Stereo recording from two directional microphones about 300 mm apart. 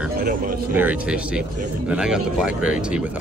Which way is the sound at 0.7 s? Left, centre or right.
Centre.